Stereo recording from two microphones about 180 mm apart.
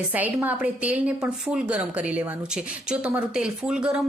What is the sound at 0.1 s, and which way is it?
A woman's voice, 10° right (ahead or behind).